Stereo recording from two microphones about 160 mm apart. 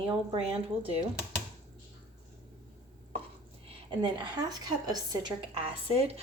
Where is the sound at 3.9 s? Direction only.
30° right (ahead or behind).